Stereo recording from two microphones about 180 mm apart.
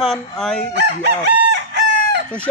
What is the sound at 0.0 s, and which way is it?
Chicken, 5° left (ahead or behind).